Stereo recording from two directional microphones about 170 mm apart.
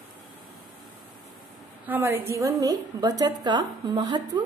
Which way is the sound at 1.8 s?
10° right (ahead or behind).